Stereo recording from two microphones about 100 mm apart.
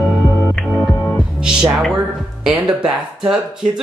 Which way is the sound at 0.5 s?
5° left (ahead or behind).